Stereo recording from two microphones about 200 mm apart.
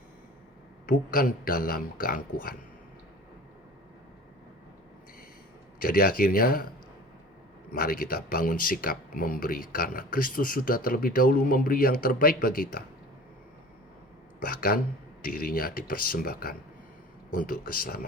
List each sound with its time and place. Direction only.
0.9 s speech: 45° left (ahead or behind)
5.8 s speech: 45° left (ahead or behind)
7.7 s speech: 45° left (ahead or behind)
14.4 s speech: 50° left (ahead or behind)